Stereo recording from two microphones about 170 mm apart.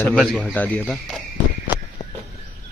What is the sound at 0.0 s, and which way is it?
Speech, centre (ahead or behind).